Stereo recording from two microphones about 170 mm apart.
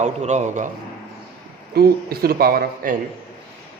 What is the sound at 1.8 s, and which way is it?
Speech, 65° right (ahead or behind).